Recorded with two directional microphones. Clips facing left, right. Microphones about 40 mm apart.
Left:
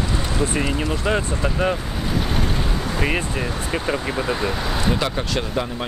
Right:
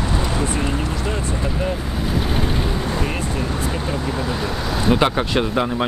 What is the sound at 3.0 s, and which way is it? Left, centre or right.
Speech, left.